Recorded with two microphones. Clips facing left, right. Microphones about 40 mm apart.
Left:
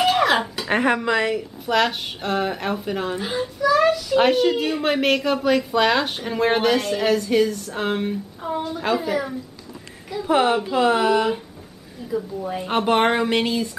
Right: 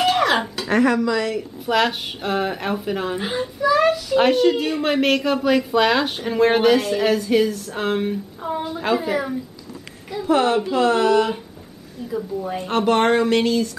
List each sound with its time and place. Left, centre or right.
0.0 s a sound: centre
0.7 s a woman's voice: left
1.7 s speech: centre
3.2 s speech: centre
10.2 s speech: centre
12.1 s speech: centre
12.6 s speech: centre